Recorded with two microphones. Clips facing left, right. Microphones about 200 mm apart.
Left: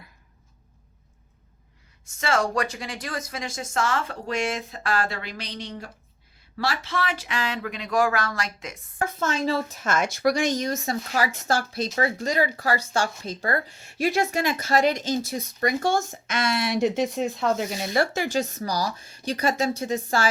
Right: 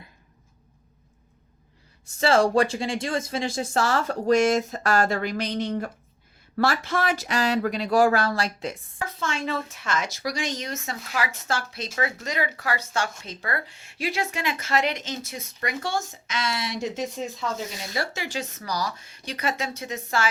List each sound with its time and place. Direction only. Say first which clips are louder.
2.2 s speech: right 5 dB; 30° right (ahead or behind)
9.0 s a woman's voice: left 6 dB; 50° left (ahead or behind)